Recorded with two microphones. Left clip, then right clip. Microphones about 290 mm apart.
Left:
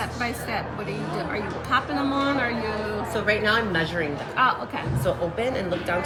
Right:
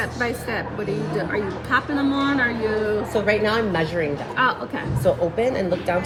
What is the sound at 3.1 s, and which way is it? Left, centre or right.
Speech, centre.